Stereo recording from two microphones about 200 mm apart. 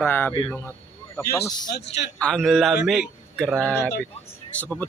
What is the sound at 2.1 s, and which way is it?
A man's voice, 5° left (ahead or behind).